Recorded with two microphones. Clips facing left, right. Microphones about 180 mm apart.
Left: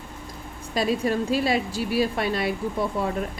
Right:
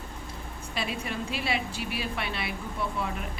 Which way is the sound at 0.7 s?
40° left (ahead or behind).